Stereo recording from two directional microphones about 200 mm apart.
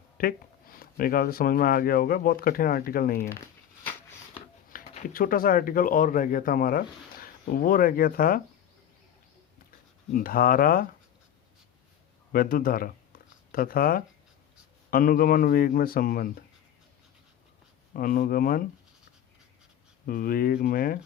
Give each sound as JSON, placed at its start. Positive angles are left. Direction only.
{"t": 0.2, "sound": "speech", "side_deg": 45}
{"t": 4.7, "sound": "speech", "side_deg": 45}
{"t": 10.1, "sound": "speech", "side_deg": 45}
{"t": 12.3, "sound": "speech", "side_deg": 45}
{"t": 17.9, "sound": "speech", "side_deg": 45}
{"t": 20.1, "sound": "speech", "side_deg": 45}